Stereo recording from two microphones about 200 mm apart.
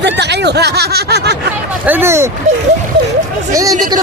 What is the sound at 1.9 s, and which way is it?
Speech, 10° right (ahead or behind).